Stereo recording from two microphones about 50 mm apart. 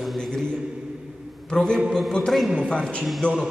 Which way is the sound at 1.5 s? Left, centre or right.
Centre.